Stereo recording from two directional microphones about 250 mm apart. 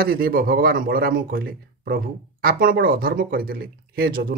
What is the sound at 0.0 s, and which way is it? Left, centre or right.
Speech, right.